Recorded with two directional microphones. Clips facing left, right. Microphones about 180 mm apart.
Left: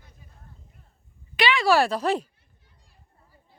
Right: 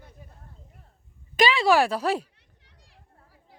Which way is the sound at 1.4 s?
40° right (ahead or behind).